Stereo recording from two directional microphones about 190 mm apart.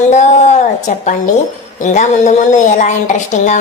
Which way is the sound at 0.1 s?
40° left (ahead or behind).